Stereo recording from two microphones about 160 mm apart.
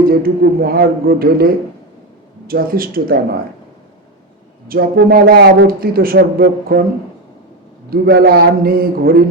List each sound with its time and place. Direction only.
0.0 s speech: 65° right (ahead or behind)
4.7 s speech: 70° right (ahead or behind)
7.9 s speech: 70° right (ahead or behind)